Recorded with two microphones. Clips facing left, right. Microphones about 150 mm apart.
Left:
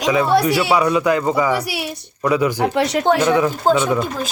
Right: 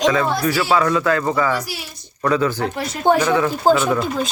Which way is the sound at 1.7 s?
65° left (ahead or behind).